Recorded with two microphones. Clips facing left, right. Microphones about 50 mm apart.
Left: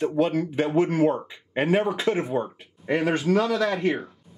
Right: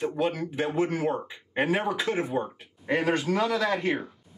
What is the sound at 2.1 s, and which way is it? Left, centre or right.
A man's voice, centre.